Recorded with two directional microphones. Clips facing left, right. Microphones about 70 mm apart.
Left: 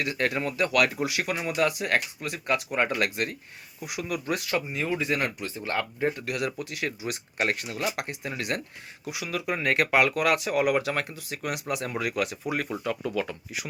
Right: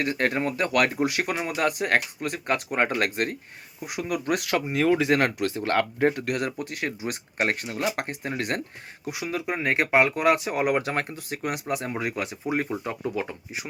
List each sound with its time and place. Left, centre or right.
0.0 s speech: right